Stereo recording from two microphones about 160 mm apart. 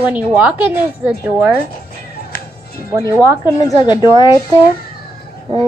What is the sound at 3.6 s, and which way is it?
Speech, 25° left (ahead or behind).